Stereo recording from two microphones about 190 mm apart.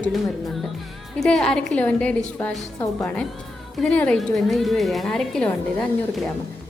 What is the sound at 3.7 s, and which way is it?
A woman's voice, 5° left (ahead or behind).